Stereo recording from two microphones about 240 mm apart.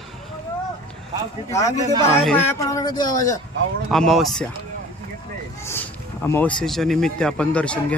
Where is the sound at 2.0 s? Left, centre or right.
Centre.